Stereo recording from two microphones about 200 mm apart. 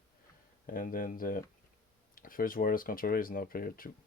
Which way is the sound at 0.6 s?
45° left (ahead or behind).